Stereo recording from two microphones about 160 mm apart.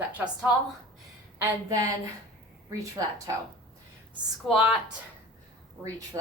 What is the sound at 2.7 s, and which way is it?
Speech, 20° right (ahead or behind).